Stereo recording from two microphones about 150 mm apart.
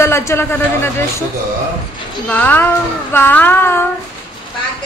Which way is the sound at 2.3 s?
10° left (ahead or behind).